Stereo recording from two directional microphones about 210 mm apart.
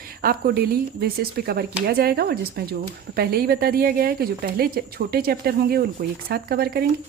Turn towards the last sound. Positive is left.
turn(degrees=-45)  # may be behind; listen again after turning